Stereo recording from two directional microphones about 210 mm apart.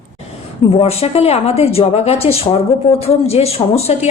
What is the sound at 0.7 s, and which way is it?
A woman's voice, 30° left (ahead or behind).